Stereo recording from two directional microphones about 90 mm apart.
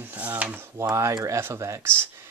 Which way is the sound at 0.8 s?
35° right (ahead or behind).